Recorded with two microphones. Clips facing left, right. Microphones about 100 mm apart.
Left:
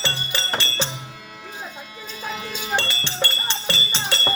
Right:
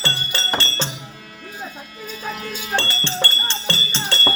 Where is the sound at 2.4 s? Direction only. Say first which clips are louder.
Right 1 dB; 15° left (ahead or behind).